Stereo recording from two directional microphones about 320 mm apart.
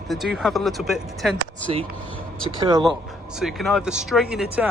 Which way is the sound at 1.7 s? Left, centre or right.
Centre.